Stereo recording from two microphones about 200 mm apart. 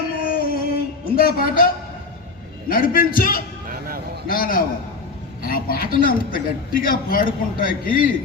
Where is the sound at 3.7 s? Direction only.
45° right (ahead or behind).